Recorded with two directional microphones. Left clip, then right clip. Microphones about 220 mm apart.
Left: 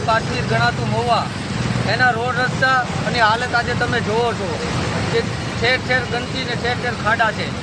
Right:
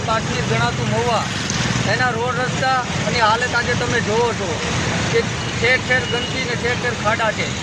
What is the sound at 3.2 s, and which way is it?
Speech, 30° left (ahead or behind).